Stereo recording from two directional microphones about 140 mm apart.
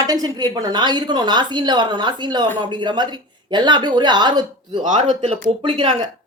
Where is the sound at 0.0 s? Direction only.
30° right (ahead or behind).